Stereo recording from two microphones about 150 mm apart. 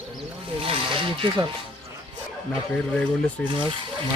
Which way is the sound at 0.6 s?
35° right (ahead or behind).